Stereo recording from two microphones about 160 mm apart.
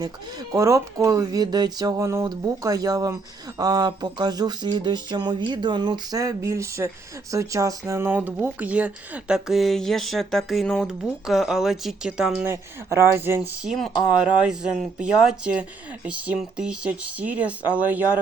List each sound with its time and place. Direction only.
0.5 s a sound: 20° right (ahead or behind)
5.5 s speech: 30° right (ahead or behind)
13.7 s speech: centre (ahead or behind)